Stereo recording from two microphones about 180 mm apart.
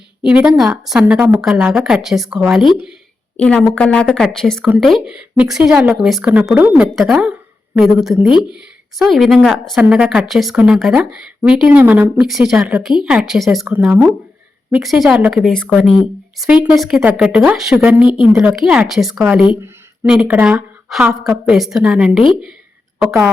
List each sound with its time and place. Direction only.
0.3 s a woman's voice: 5° right (ahead or behind)
13.7 s a woman's voice: 10° right (ahead or behind)
14.7 s a woman's voice: centre (ahead or behind)